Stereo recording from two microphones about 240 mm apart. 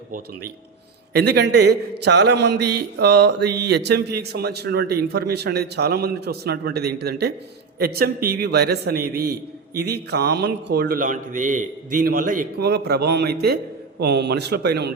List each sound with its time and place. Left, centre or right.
1.1 s a man's voice: right